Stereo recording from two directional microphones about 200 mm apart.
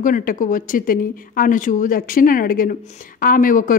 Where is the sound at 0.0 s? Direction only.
45° left (ahead or behind).